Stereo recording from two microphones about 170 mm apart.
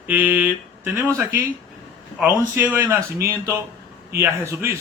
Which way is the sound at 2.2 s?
10° right (ahead or behind).